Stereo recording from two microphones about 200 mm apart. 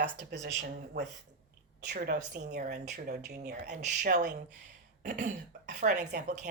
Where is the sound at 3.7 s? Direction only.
35° right (ahead or behind).